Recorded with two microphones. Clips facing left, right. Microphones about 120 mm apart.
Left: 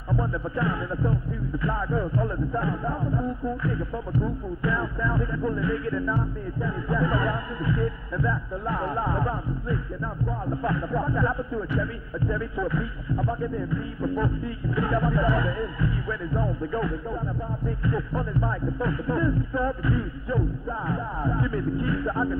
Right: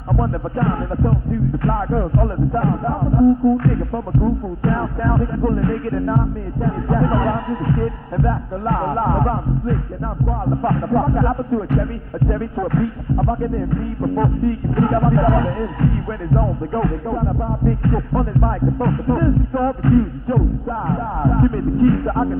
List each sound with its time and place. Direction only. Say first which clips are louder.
0.1 s music: right 6 dB; 50° right (ahead or behind)
10.4 s speech: right 8 dB; 55° right (ahead or behind)
17.6 s music: right 8 dB; 50° right (ahead or behind)